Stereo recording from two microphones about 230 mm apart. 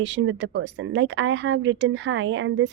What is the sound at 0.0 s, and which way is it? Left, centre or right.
A woman's voice, right.